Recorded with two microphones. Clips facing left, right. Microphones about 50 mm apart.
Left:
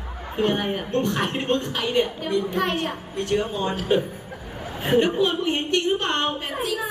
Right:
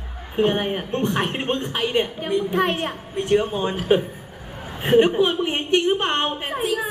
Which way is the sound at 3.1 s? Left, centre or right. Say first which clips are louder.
Right 5 dB; right.